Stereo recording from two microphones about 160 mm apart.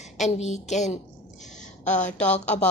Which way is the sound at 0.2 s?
45° left (ahead or behind).